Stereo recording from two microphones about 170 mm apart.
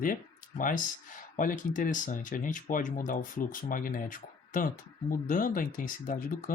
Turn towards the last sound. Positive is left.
turn(degrees=55)  # may be behind; listen again after turning